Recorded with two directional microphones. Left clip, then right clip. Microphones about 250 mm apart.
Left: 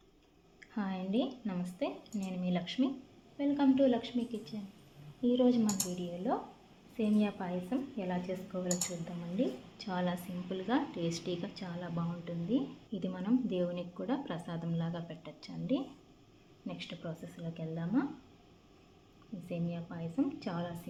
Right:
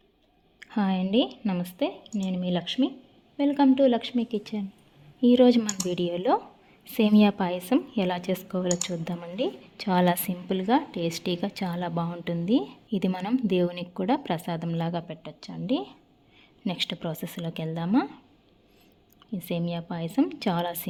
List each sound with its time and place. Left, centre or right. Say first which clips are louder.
0.6 s a woman's voice: right 11 dB; right
19.5 s a woman's voice: right 10 dB; right